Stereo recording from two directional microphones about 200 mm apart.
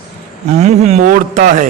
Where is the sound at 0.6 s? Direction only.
35° right (ahead or behind).